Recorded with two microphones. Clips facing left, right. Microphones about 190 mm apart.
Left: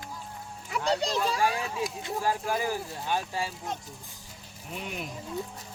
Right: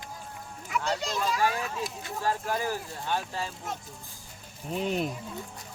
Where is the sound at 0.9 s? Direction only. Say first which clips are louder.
Left 4 dB; 35° left (ahead or behind).